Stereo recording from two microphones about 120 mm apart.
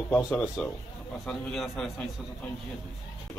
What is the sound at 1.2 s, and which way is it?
Speech, 5° left (ahead or behind).